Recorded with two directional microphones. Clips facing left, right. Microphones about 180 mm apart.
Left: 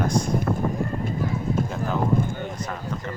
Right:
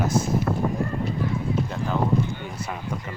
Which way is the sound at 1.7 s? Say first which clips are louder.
Even; centre (ahead or behind).